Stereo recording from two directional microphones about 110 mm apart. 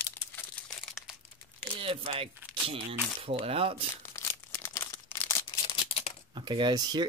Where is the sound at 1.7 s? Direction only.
60° right (ahead or behind).